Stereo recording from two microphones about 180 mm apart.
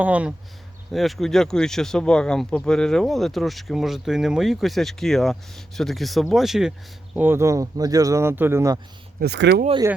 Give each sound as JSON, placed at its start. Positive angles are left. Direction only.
{"t": 0.0, "sound": "speech", "side_deg": -5}
{"t": 7.2, "sound": "speech", "side_deg": -15}
{"t": 9.2, "sound": "speech", "side_deg": -65}